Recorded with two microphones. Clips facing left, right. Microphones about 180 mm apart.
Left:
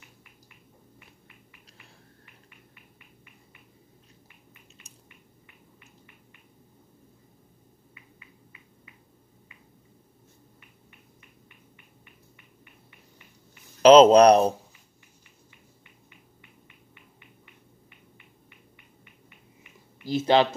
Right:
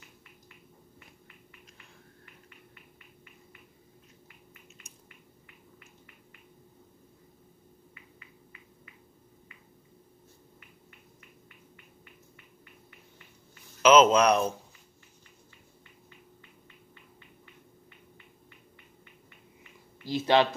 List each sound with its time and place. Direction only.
13.8 s speech: 35° left (ahead or behind)
20.1 s speech: 25° left (ahead or behind)